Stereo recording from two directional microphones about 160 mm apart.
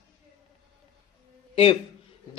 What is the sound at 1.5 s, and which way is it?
Speech, 35° left (ahead or behind).